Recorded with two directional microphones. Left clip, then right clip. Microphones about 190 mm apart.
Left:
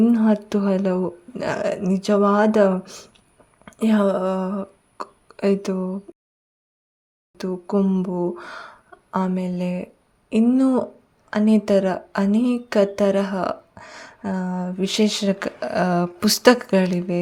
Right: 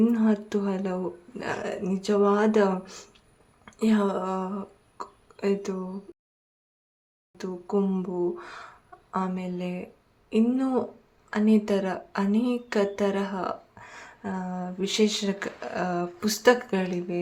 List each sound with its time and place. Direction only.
0.0 s speech: 30° left (ahead or behind)
7.3 s speech: 40° left (ahead or behind)